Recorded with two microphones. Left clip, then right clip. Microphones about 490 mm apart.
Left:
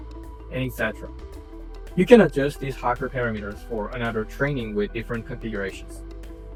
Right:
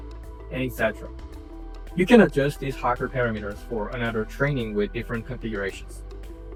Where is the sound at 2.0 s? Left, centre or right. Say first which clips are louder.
Left 2 dB; centre.